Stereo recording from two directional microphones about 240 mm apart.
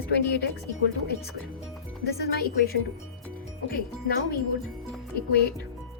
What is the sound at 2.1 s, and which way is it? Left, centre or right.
Speech, left.